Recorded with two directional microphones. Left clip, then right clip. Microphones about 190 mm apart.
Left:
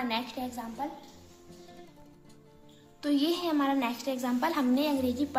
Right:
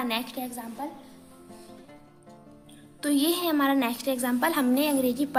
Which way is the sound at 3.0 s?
30° right (ahead or behind).